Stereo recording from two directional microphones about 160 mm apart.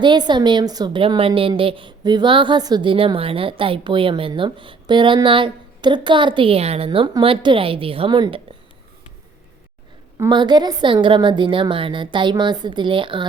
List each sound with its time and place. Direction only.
0.0 s a woman's voice: 30° right (ahead or behind)
10.2 s a woman's voice: 25° right (ahead or behind)